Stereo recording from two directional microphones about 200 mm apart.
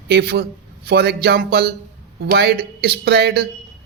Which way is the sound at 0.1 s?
50° right (ahead or behind).